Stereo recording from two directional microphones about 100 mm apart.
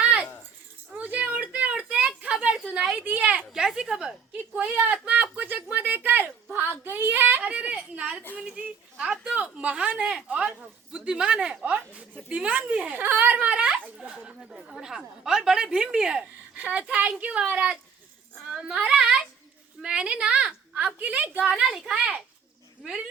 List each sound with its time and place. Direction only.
0.0 s rattle: 15° right (ahead or behind)
0.9 s a sound: 15° right (ahead or behind)
3.5 s a woman's voice: 5° right (ahead or behind)
5.0 s a sound: 15° right (ahead or behind)
8.4 s a woman's voice: 10° right (ahead or behind)
21.5 s a woman's voice: 5° right (ahead or behind)